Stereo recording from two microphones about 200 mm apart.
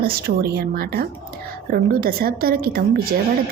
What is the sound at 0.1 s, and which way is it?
Speech, 50° right (ahead or behind).